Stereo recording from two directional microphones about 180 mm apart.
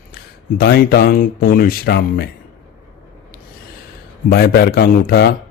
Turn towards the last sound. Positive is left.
turn(degrees=60)  # may be behind; listen again after turning